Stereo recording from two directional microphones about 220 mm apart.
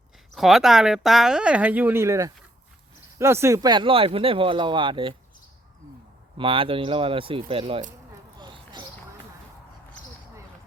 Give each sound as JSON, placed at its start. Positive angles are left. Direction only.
{"t": 0.3, "sound": "speech", "side_deg": 0}
{"t": 6.3, "sound": "speech", "side_deg": -25}
{"t": 8.4, "sound": "a sound", "side_deg": -20}